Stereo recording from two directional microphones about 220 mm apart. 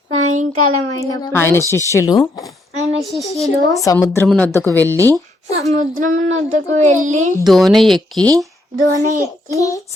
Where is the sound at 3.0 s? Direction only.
Centre (ahead or behind).